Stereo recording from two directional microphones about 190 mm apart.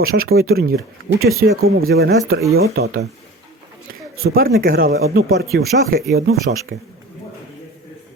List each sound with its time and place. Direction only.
0.0 s speech: 50° right (ahead or behind)
4.4 s speech: 50° right (ahead or behind)